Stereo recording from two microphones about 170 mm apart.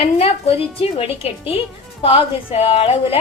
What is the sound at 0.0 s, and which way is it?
A woman's voice, 35° left (ahead or behind).